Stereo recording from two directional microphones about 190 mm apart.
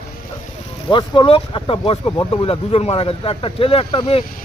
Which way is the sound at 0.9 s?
25° left (ahead or behind).